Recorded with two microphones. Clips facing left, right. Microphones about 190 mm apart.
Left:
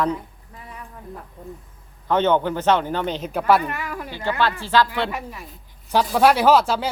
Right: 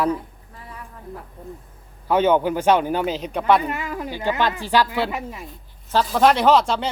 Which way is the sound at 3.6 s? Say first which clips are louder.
Right 2 dB; 20° right (ahead or behind).